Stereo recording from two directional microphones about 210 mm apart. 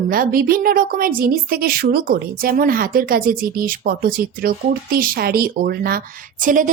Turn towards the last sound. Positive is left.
turn(degrees=-40)  # may be behind; listen again after turning